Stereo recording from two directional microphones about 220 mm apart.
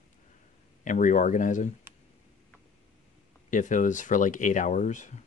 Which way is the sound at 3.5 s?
35° left (ahead or behind).